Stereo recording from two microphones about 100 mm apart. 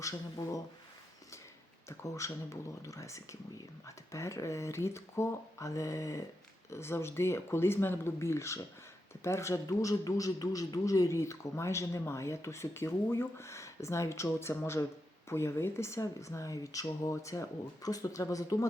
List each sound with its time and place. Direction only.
0.0 s speech: 35° left (ahead or behind)
1.9 s a man's voice: 30° left (ahead or behind)